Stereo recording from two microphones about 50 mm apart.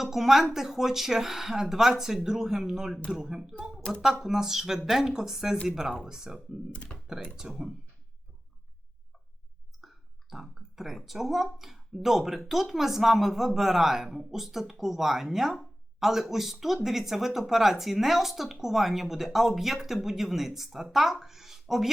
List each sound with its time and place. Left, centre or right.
0.0 s speech: centre
6.9 s computer keyboard: centre
7.3 s speech: centre
9.8 s a sound: centre
11.5 s a woman's voice: centre